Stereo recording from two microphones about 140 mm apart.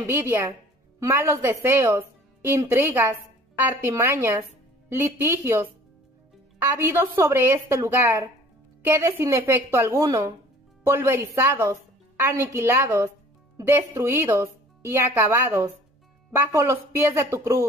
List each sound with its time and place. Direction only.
0.0 s a woman's voice: 15° right (ahead or behind)